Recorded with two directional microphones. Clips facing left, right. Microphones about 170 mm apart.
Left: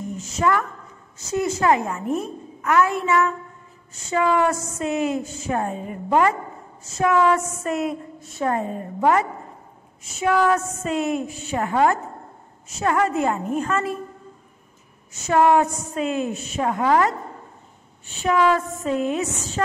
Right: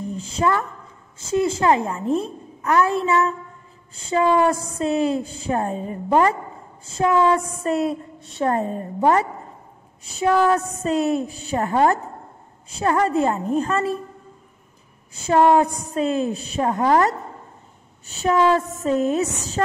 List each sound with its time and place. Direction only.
0.1 s a sound: 30° right (ahead or behind)
1.1 s a woman's voice: 25° right (ahead or behind)
15.1 s a woman's voice: 30° right (ahead or behind)